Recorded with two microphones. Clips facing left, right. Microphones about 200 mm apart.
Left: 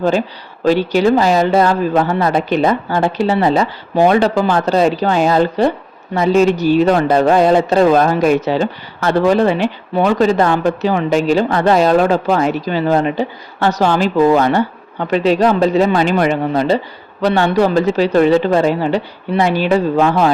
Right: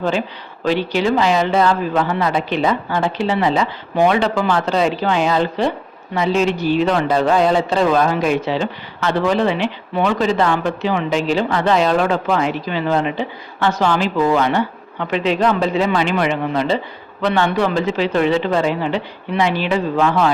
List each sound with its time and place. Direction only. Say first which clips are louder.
0.6 s a man's voice: left 5 dB; 40° left (ahead or behind)